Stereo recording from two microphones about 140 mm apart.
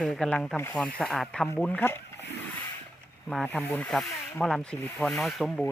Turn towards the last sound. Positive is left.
turn(degrees=0)  # may be behind; listen again after turning